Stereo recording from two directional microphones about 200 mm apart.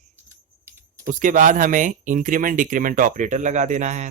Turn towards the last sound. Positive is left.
turn(degrees=-35)  # may be behind; listen again after turning